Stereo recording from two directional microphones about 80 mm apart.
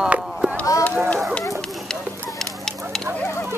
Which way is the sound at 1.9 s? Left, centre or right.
Centre.